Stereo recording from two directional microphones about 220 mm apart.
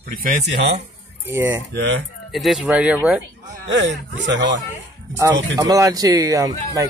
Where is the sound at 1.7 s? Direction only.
50° right (ahead or behind).